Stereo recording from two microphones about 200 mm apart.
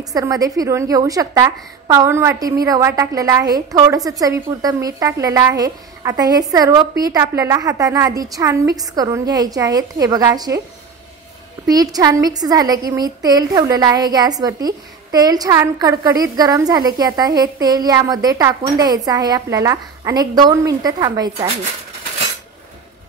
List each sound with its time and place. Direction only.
0.1 s a woman's voice: 20° right (ahead or behind)
11.6 s a woman's voice: 20° right (ahead or behind)